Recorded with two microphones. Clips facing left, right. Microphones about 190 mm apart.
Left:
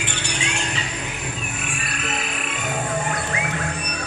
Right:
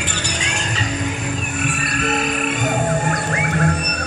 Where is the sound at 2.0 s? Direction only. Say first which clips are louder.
Right 9 dB; 45° right (ahead or behind).